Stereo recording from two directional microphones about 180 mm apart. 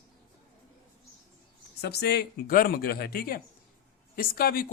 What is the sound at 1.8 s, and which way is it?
Speech, 65° left (ahead or behind).